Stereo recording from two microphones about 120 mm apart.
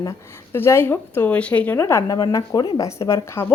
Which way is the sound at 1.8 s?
30° left (ahead or behind).